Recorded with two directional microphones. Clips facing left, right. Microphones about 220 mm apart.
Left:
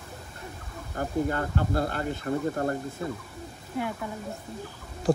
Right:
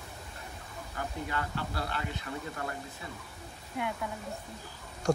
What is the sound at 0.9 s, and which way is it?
Speech, 45° left (ahead or behind).